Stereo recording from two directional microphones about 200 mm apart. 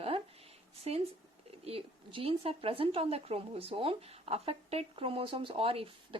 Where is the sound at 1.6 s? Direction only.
30° right (ahead or behind).